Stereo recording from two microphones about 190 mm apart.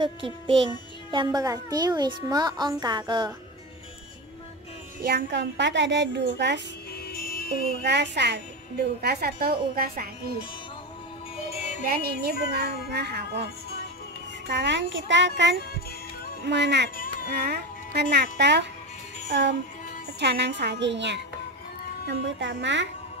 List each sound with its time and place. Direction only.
0.0 s a child's voice: 25° right (ahead or behind)
5.0 s speech: 60° right (ahead or behind)
7.1 s music: 50° left (ahead or behind)
7.8 s a woman's voice: 65° right (ahead or behind)
11.5 s music: 35° left (ahead or behind)
11.8 s speech: 55° right (ahead or behind)
14.5 s speech: 65° right (ahead or behind)
16.9 s baby cry: 45° left (ahead or behind)
17.5 s speech: 60° right (ahead or behind)
19.2 s music: 65° right (ahead or behind)
20.2 s speech: 65° right (ahead or behind)